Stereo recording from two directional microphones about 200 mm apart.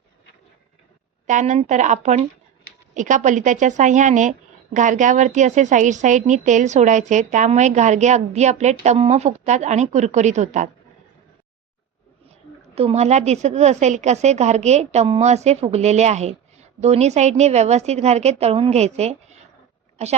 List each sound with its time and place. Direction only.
1.3 s a woman's voice: 35° right (ahead or behind)
12.7 s a woman's voice: 30° right (ahead or behind)